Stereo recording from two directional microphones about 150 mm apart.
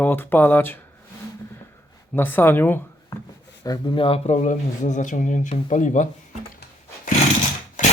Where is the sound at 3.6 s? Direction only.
25° left (ahead or behind); by 6.1 s 55° left (ahead or behind).